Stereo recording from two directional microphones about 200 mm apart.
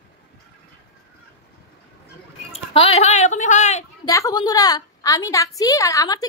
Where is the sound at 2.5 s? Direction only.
30° left (ahead or behind).